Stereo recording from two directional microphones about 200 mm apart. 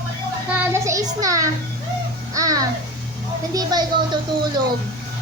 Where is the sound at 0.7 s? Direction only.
15° right (ahead or behind).